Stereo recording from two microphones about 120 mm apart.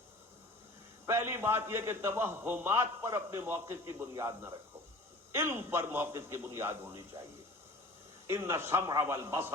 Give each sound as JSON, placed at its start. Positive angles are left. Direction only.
{"t": 1.0, "sound": "a man's voice", "side_deg": -20}
{"t": 8.3, "sound": "a man's voice", "side_deg": -20}